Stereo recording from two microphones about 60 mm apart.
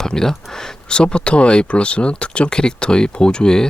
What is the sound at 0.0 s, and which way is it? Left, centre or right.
Speech, centre.